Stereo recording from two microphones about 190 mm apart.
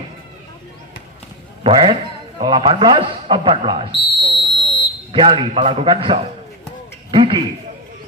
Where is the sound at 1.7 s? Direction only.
30° right (ahead or behind).